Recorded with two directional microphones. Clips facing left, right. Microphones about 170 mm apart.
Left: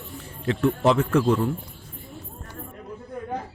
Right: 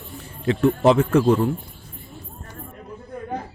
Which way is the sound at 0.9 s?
20° right (ahead or behind).